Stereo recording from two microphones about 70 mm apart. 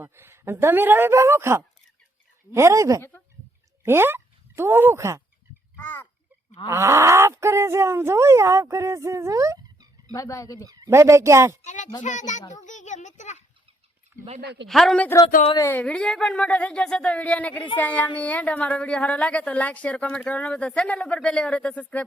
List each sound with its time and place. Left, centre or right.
0.0 s speech: right
3.8 s speech: right
5.7 s a sound: left
6.7 s speech: right
10.1 s speech: left
10.8 s speech: right
11.9 s a child's voice: left
14.7 s speech: centre
15.8 s speech: centre
16.4 s speech: centre